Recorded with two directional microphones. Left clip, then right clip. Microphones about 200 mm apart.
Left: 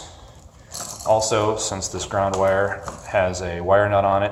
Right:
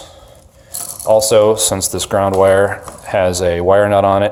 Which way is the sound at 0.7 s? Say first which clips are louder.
Right 7 dB; 60° right (ahead or behind).